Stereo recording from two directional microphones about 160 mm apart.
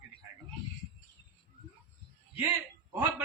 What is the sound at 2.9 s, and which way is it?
Speech, 15° right (ahead or behind).